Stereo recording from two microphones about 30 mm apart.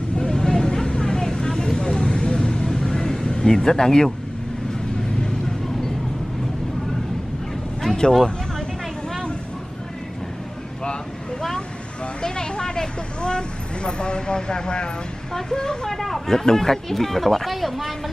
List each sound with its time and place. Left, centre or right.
0.3 s vehicle: left
3.3 s speech: left
7.8 s a sound: centre
12.2 s vehicle: left
15.3 s speech: left; by 17.9 s centre